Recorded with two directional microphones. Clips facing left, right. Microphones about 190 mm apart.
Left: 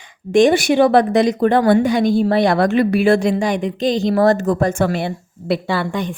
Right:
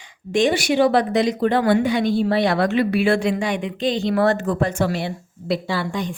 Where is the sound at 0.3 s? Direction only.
50° left (ahead or behind).